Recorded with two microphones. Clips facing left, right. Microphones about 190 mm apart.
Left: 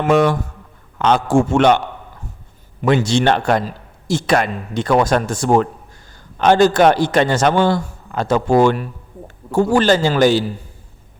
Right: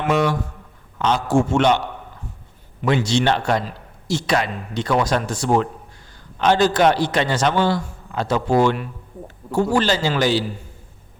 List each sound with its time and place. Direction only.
0.0 s a man's voice: 50° left (ahead or behind)
2.8 s a man's voice: 50° left (ahead or behind)